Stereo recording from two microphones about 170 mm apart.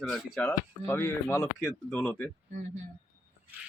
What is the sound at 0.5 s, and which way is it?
Speech, 15° left (ahead or behind).